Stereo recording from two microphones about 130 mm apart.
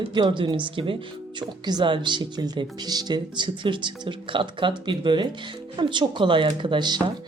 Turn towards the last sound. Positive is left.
turn(degrees=-35)  # may be behind; listen again after turning